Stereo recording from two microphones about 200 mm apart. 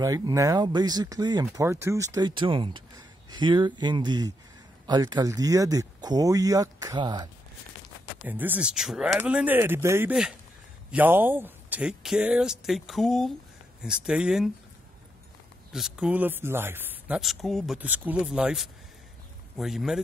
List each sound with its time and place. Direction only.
0.0 s speech: 15° right (ahead or behind)
8.3 s speech: 10° right (ahead or behind)
15.7 s speech: 5° right (ahead or behind)